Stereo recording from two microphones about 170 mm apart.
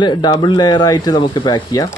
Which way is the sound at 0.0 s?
25° left (ahead or behind).